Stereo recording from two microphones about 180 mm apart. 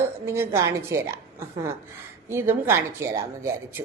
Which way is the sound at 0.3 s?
15° right (ahead or behind).